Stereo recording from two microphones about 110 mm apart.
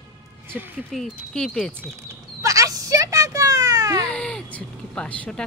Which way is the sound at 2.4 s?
30° right (ahead or behind).